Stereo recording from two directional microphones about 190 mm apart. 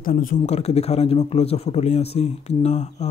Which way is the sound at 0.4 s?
35° left (ahead or behind).